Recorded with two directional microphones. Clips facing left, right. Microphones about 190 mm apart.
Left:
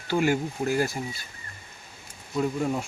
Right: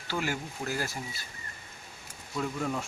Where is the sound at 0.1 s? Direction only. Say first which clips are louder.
Left 9 dB; 15° left (ahead or behind).